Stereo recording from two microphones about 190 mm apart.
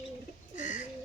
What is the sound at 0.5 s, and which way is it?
Bird, 40° left (ahead or behind).